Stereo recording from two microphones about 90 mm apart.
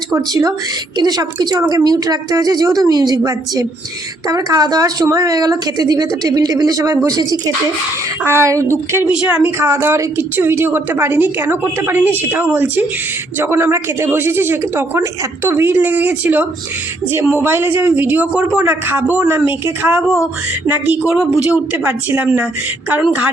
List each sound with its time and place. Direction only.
0.1 s speech: 40° right (ahead or behind)
8.2 s a woman's voice: 30° right (ahead or behind)
9.0 s a woman's voice: 15° right (ahead or behind)
9.6 s a woman's voice: 30° right (ahead or behind)
21.0 s a woman's voice: 10° right (ahead or behind)